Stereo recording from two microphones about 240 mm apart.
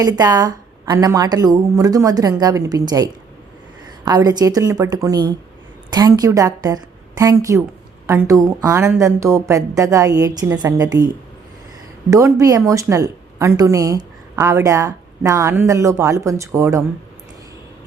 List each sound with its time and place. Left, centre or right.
0.0 s a woman's voice: centre
12.1 s a woman's voice: centre